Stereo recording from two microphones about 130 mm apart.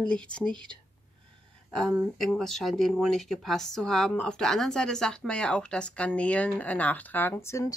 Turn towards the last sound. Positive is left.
turn(degrees=20)  # may be behind; listen again after turning